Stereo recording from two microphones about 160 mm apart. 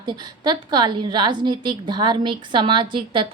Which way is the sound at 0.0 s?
30° right (ahead or behind).